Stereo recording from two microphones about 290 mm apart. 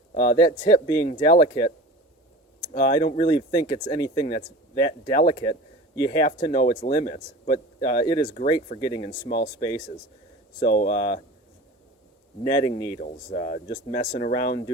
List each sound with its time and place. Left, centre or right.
0.1 s speech: left
0.3 s speech: centre
1.0 s speech: left
2.7 s speech: left
3.7 s speech: centre
10.6 s speech: left
12.5 s speech: centre
13.0 s speech: left